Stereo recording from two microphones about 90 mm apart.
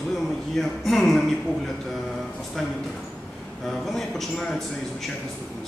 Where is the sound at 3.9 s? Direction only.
Centre (ahead or behind).